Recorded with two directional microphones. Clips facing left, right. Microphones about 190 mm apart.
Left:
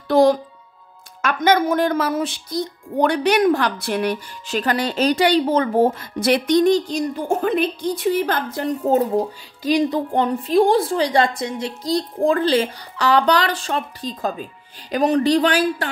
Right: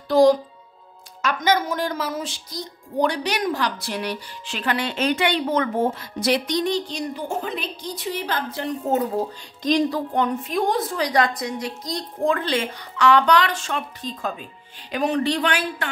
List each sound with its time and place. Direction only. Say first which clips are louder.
0.1 s speech: left 1 dB; 60° left (ahead or behind)
9.1 s speech: left 4 dB; 10° left (ahead or behind)
9.8 s a woman's voice: left 3 dB; 25° left (ahead or behind)